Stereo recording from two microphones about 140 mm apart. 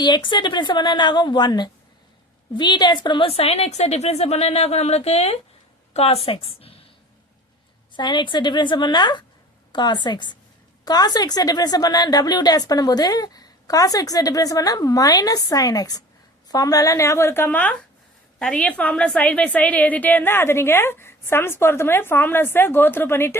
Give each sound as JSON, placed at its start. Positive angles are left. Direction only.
{"t": 0.0, "sound": "a woman's voice", "side_deg": 35}
{"t": 7.9, "sound": "a woman's voice", "side_deg": 35}